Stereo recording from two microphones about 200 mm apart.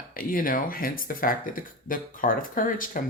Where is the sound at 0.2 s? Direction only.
45° left (ahead or behind).